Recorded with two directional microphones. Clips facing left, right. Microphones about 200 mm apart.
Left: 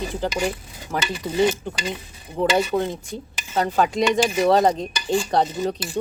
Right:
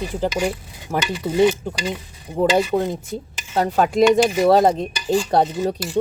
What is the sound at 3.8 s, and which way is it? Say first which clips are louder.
Speech: right 5 dB; centre (ahead or behind).